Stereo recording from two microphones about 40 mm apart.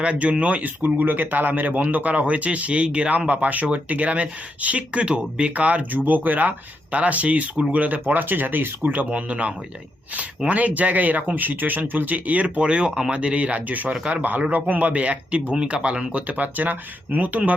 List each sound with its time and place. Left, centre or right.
0.0 s speech: right
6.1 s speech: right
8.0 s speech: right
9.0 s speech: right
16.2 s speech: right